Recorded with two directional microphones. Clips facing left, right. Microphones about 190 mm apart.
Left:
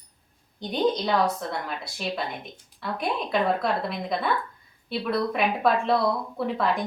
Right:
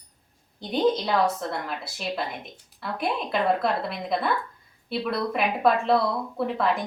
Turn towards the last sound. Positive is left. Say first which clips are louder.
# even
turn(degrees=0)  # may be behind; listen again after turning